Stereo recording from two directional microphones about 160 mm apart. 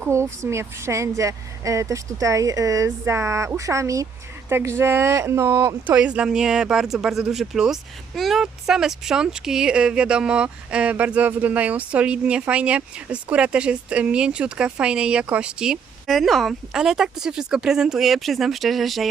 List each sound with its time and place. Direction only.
0.1 s speech: 15° right (ahead or behind); by 19.0 s centre (ahead or behind)